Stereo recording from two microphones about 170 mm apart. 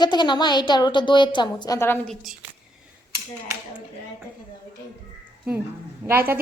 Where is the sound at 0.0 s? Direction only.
25° left (ahead or behind).